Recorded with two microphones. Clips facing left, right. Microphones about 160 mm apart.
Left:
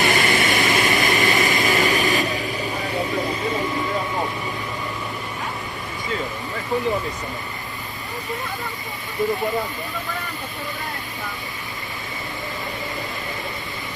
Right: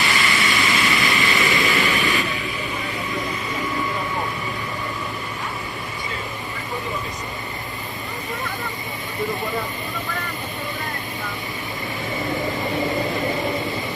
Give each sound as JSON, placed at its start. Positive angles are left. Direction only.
{"t": 0.0, "sound": "vehicle", "side_deg": 50}